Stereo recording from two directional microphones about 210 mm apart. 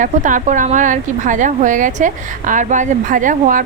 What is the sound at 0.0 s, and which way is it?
Speech, 40° right (ahead or behind).